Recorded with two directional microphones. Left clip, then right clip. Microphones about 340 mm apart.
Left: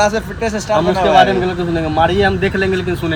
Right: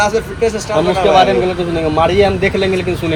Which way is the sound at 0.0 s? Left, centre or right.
Centre.